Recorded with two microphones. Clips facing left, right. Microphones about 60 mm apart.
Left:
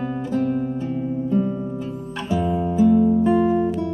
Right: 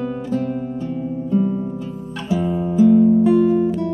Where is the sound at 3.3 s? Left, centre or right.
Left.